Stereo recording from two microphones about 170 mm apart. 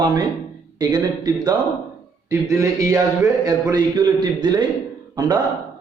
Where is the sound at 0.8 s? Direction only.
25° right (ahead or behind).